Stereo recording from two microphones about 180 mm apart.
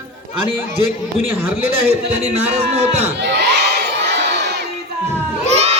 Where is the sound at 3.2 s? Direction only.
65° right (ahead or behind).